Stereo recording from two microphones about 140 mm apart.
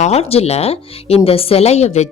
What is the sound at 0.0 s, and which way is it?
A woman's voice, 50° left (ahead or behind).